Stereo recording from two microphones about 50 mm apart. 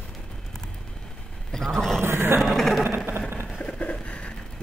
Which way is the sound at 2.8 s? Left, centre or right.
Right.